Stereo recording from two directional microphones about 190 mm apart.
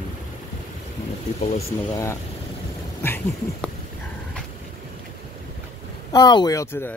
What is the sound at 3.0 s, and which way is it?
Speech, 10° left (ahead or behind).